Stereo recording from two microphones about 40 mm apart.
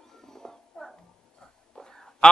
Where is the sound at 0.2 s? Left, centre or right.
Centre.